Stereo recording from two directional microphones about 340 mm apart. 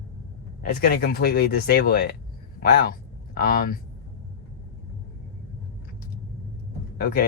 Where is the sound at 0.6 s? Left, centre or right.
Left.